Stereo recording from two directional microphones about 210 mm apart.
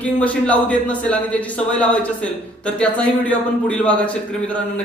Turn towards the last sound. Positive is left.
turn(degrees=5)  # may be behind; listen again after turning